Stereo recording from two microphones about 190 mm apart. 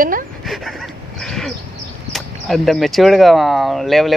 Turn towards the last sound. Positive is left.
turn(degrees=0)  # may be behind; listen again after turning